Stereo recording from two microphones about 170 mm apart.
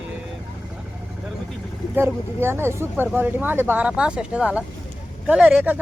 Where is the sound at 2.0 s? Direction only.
15° right (ahead or behind).